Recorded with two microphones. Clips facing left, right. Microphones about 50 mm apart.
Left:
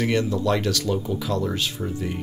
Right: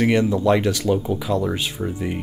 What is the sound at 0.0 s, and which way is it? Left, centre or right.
Speech, right.